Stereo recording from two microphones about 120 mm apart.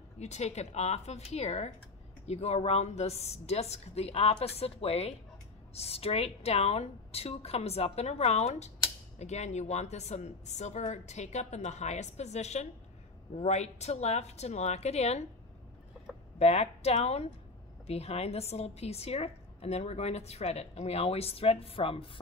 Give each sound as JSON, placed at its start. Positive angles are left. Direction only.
{"t": 0.2, "sound": "a woman's voice", "side_deg": 70}
{"t": 16.3, "sound": "a woman's voice", "side_deg": 60}